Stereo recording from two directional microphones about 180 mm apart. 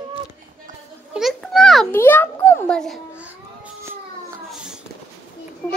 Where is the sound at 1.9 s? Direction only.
10° left (ahead or behind); by 4.0 s 10° right (ahead or behind).